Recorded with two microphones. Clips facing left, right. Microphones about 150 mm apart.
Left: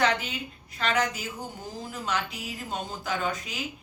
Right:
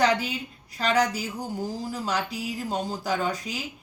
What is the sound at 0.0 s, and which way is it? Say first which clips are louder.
A woman's voice: right 3 dB; 35° right (ahead or behind).